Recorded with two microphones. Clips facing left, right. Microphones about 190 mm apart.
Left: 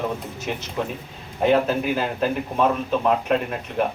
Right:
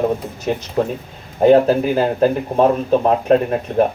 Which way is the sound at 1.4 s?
40° right (ahead or behind).